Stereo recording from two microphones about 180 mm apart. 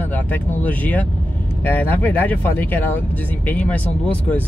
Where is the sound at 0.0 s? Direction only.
10° left (ahead or behind).